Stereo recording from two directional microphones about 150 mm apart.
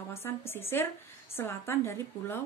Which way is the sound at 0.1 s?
15° left (ahead or behind).